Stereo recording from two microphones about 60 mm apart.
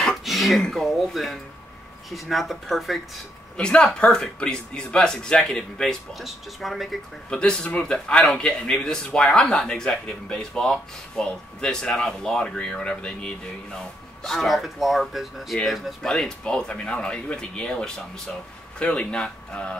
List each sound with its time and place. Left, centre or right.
0.0 s speech: centre
3.5 s speech: centre
6.1 s speech: centre
7.2 s speech: centre